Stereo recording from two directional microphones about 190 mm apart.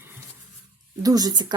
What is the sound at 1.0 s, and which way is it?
Speech, 20° right (ahead or behind).